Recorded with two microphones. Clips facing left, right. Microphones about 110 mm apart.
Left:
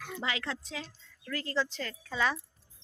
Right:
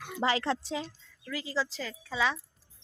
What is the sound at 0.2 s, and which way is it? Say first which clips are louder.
Speech: right 8 dB; 35° right (ahead or behind).